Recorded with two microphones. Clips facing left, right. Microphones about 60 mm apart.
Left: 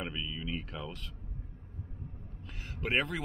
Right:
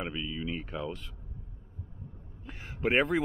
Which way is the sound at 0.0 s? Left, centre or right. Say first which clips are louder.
Right 3 dB; centre.